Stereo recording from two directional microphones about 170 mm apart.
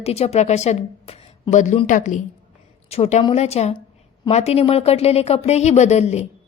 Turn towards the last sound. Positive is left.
turn(degrees=40)  # may be behind; listen again after turning